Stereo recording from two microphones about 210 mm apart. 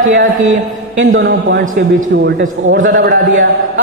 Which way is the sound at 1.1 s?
60° right (ahead or behind).